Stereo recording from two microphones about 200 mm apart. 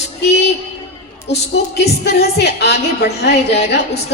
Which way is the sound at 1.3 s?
55° left (ahead or behind).